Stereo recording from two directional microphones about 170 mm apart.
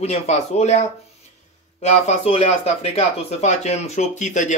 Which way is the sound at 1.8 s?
40° left (ahead or behind).